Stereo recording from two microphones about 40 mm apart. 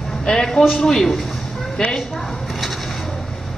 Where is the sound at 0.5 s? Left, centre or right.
Centre.